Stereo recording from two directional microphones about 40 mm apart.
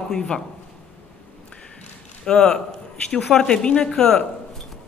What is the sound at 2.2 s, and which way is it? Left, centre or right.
Speech, centre.